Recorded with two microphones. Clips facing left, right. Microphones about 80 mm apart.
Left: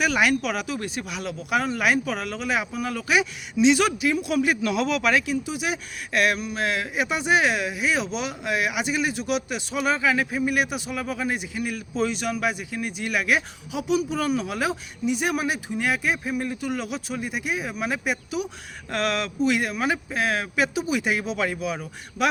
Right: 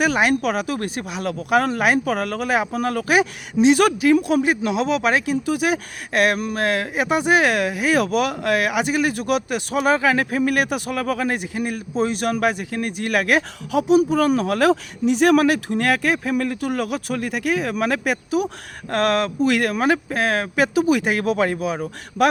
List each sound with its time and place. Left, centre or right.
0.0 s speech: right
12.3 s speech: right
18.3 s speech: right